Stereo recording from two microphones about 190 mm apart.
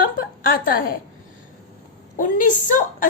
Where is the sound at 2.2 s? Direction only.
45° left (ahead or behind).